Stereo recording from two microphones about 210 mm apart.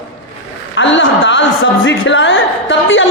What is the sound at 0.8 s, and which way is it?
A man's voice, 60° left (ahead or behind).